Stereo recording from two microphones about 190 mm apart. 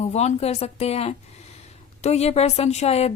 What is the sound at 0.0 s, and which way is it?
A woman's voice, 35° left (ahead or behind).